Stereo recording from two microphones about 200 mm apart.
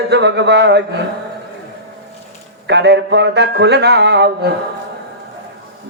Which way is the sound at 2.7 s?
60° right (ahead or behind).